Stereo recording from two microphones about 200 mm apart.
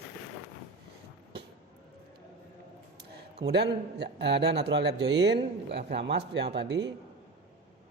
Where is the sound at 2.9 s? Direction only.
55° right (ahead or behind).